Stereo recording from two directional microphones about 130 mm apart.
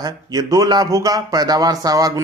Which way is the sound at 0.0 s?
30° right (ahead or behind).